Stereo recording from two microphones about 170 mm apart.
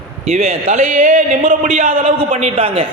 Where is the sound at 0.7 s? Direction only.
50° right (ahead or behind).